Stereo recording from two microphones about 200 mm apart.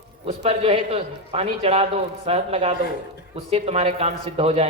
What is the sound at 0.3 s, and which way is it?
A man's voice, 30° right (ahead or behind).